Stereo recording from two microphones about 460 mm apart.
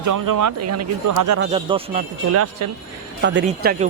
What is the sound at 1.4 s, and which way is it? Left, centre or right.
Speech, centre.